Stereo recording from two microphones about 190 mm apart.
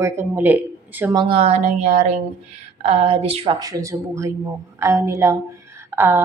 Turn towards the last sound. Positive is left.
turn(degrees=-10)  # may be behind; listen again after turning